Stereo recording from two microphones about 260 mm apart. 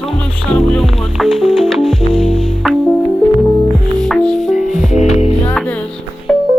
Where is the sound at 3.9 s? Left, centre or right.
Centre.